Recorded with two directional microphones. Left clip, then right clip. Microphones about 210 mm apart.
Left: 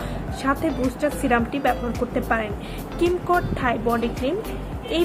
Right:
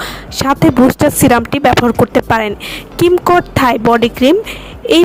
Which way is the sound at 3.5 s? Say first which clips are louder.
Right 12 dB; 50° right (ahead or behind).